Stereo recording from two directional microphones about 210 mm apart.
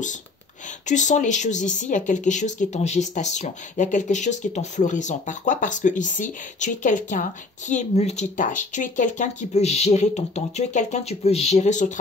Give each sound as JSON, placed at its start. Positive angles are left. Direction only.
{"t": 0.8, "sound": "speech", "side_deg": 35}